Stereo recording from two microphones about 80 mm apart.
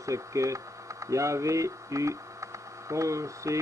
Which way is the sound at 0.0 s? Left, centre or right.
Right.